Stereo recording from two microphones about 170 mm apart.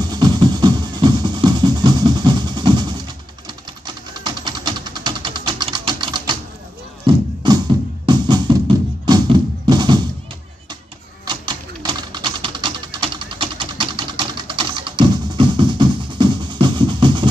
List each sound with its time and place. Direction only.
0.0 s music: 25° right (ahead or behind)
3.4 s sewing machine: 25° right (ahead or behind)
7.1 s music: 25° right (ahead or behind)
11.2 s typewriter: 25° right (ahead or behind)